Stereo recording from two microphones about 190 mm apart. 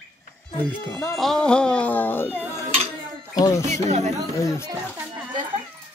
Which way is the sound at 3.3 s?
15° left (ahead or behind).